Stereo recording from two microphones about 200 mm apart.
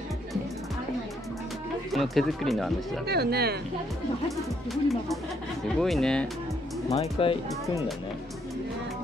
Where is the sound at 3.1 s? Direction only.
55° right (ahead or behind).